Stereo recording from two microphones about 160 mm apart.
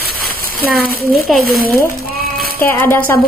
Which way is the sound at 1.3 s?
Centre (ahead or behind).